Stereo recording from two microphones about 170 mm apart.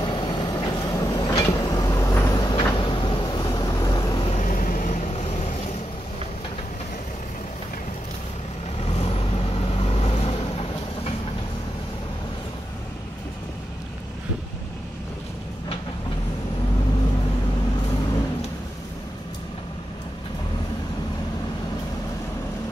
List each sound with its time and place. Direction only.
0.0 s vehicle: 25° left (ahead or behind)
4.3 s vehicle: 45° left (ahead or behind)
8.8 s vehicle: 35° left (ahead or behind)